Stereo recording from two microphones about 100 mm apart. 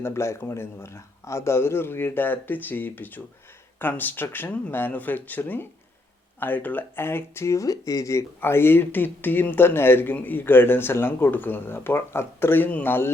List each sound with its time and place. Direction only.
0.0 s speech: 25° left (ahead or behind)